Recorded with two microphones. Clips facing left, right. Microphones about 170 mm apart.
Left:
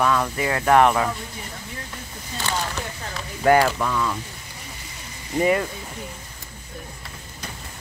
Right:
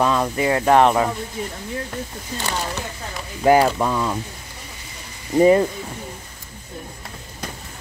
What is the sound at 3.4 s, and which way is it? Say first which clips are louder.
Speech: right 2 dB; 20° right (ahead or behind).